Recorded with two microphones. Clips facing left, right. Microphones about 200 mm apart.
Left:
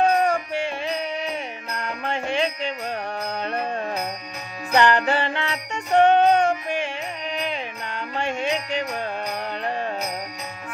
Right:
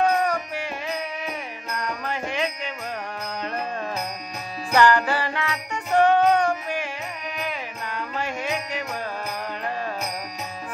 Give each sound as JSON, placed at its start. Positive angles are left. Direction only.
{"t": 0.0, "sound": "music", "side_deg": 25}
{"t": 2.0, "sound": "music", "side_deg": 30}
{"t": 4.7, "sound": "music", "side_deg": 20}
{"t": 8.2, "sound": "music", "side_deg": 25}